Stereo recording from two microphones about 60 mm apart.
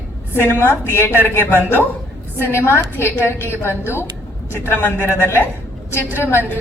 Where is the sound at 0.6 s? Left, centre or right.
Left.